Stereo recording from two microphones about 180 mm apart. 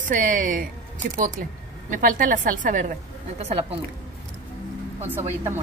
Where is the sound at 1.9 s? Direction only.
45° right (ahead or behind).